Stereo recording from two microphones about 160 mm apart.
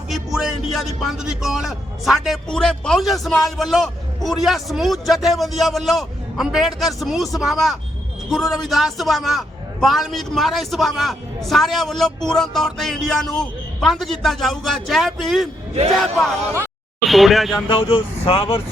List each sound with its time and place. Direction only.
0.1 s a man's voice: 5° right (ahead or behind)
17.1 s a man's voice: centre (ahead or behind)
17.7 s speech: 35° left (ahead or behind)